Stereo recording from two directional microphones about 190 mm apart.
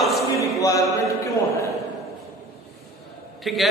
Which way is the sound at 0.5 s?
15° left (ahead or behind).